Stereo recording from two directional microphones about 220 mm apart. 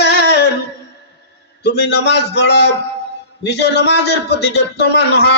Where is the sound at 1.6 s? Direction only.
50° left (ahead or behind).